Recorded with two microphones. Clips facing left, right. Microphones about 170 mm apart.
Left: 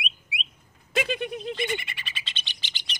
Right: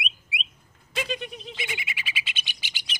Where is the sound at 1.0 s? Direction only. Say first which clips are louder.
Left 4 dB; 55° left (ahead or behind).